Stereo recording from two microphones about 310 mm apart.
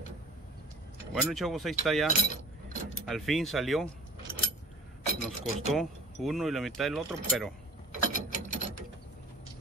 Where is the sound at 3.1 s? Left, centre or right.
Centre.